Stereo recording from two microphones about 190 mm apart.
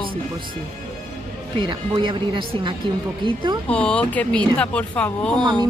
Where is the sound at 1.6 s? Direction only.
25° right (ahead or behind).